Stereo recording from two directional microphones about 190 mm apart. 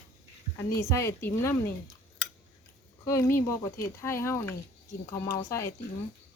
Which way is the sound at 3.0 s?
15° left (ahead or behind).